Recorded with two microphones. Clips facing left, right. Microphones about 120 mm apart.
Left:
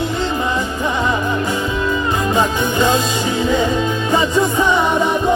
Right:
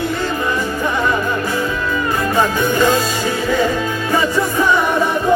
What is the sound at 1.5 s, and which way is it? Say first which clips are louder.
Music: even; 20° left (ahead or behind).